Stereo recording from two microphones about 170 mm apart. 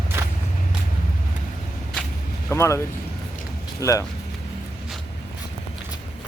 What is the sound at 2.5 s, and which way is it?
Speech, 15° left (ahead or behind).